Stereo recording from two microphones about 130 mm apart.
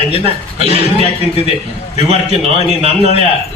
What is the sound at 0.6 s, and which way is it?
Speech, 50° right (ahead or behind).